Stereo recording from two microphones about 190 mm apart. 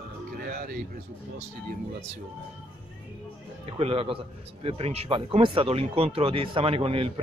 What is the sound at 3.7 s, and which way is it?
A man's voice, 30° right (ahead or behind).